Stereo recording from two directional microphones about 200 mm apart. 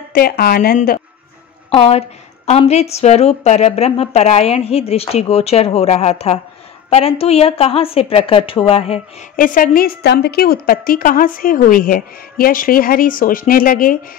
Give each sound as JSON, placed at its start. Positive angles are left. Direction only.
{"t": 0.1, "sound": "a woman's voice", "side_deg": 50}
{"t": 1.7, "sound": "a woman's voice", "side_deg": 30}
{"t": 9.4, "sound": "a woman's voice", "side_deg": 45}